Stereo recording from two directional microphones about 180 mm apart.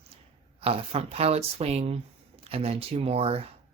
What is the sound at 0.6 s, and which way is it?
Speech, 35° right (ahead or behind).